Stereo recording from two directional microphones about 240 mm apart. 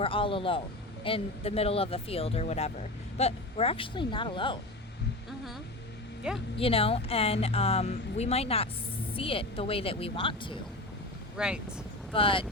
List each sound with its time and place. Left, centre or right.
0.0 s speech: left
6.3 s speech: centre
6.6 s speech: left
11.3 s speech: centre
12.1 s speech: left